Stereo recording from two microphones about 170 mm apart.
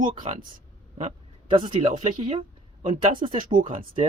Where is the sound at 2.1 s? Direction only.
40° right (ahead or behind).